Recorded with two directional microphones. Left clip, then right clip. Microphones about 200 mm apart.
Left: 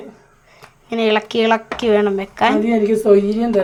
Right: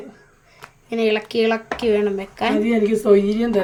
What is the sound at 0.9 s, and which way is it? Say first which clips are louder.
Speech: left 3 dB; 5° left (ahead or behind).